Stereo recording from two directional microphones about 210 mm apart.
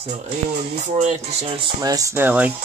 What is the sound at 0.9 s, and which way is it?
Speech, 30° right (ahead or behind).